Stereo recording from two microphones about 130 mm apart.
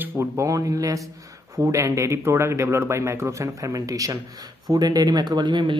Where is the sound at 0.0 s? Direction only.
20° right (ahead or behind).